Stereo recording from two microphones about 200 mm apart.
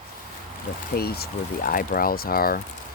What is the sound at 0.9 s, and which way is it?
Speech, 50° left (ahead or behind).